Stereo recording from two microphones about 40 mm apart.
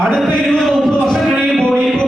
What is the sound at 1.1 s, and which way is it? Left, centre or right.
Music, centre.